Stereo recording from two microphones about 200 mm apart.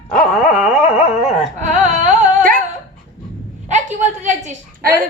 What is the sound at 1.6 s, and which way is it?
Carnatic music, 40° right (ahead or behind).